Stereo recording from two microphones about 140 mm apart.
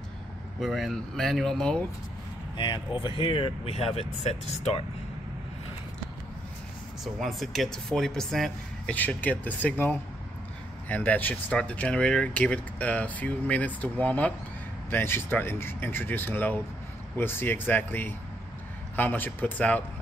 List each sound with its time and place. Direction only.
0.6 s speech: centre (ahead or behind)
2.5 s speech: 35° left (ahead or behind); by 4.8 s 50° left (ahead or behind)
7.2 s speech: centre (ahead or behind)